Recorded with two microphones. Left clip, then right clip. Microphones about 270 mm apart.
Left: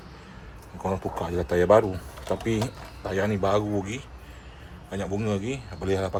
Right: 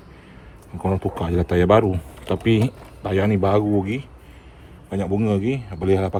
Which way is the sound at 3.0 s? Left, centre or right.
Right.